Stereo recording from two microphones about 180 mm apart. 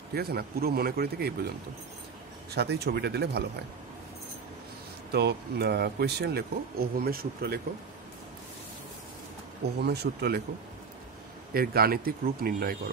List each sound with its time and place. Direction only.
0.1 s speech: 60° right (ahead or behind)
2.5 s speech: 65° right (ahead or behind)
5.1 s speech: 65° right (ahead or behind)
9.8 s speech: 65° right (ahead or behind)
11.5 s speech: 55° right (ahead or behind)